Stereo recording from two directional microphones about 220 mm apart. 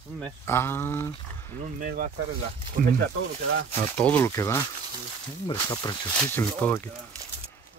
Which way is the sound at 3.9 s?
5° left (ahead or behind).